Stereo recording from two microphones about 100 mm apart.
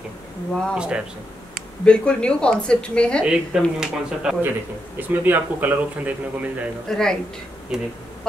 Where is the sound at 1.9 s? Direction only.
10° left (ahead or behind).